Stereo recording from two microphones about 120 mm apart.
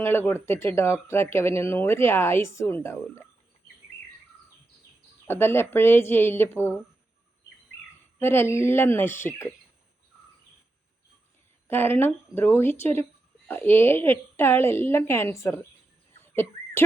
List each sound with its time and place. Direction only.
0.0 s speech: 20° left (ahead or behind)
5.2 s speech: 20° left (ahead or behind)
8.2 s speech: 20° left (ahead or behind)
11.7 s speech: 20° left (ahead or behind)
16.2 s a sound: 20° left (ahead or behind)